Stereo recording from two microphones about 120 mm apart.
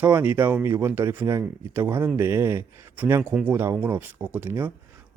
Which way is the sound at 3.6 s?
20° right (ahead or behind).